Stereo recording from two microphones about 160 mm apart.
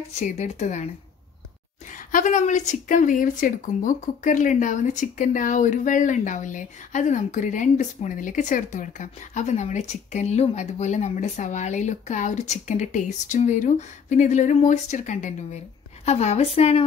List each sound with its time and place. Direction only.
0.1 s a woman's voice: 45° left (ahead or behind)
2.1 s a woman's voice: 50° left (ahead or behind)